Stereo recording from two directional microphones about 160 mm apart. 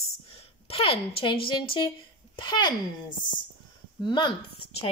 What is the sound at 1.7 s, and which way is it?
Speech, 30° left (ahead or behind).